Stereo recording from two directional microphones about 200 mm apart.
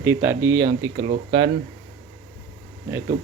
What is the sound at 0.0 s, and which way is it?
Speech, 10° right (ahead or behind).